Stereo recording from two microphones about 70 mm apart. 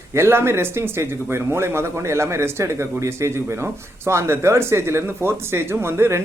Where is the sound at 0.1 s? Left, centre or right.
Right.